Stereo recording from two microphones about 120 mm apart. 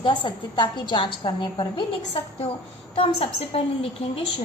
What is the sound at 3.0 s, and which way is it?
A woman's voice, 55° left (ahead or behind).